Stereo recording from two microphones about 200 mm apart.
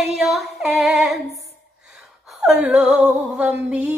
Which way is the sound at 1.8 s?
Centre (ahead or behind).